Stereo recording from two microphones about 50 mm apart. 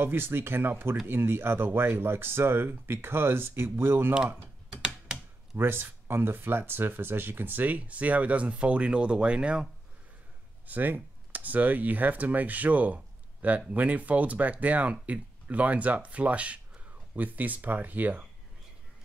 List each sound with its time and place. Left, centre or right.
0.0 s speech: right
4.6 s a sound: centre
5.6 s speech: right
10.7 s speech: right